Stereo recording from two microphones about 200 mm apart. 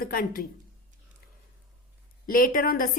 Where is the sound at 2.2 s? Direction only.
45° left (ahead or behind).